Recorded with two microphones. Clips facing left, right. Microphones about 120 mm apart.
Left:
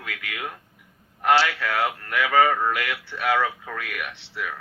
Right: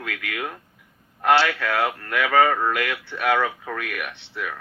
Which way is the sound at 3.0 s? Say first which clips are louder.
Right 1 dB; 20° right (ahead or behind).